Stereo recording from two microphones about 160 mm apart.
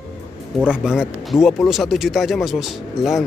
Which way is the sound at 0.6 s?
5° right (ahead or behind).